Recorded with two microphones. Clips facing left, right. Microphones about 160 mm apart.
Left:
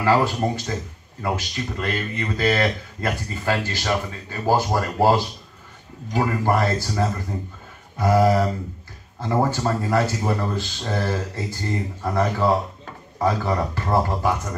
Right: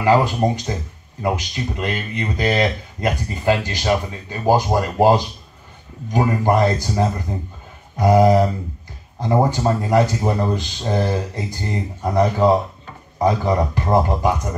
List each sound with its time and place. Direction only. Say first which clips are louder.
0.0 s speech: right 3 dB; 20° right (ahead or behind)